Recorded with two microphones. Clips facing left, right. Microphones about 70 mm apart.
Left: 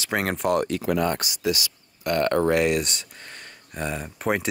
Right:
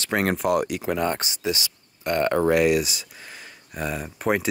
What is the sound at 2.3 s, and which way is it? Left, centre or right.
Speech, centre.